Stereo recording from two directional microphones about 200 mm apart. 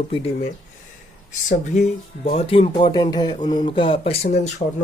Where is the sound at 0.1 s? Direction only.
30° left (ahead or behind).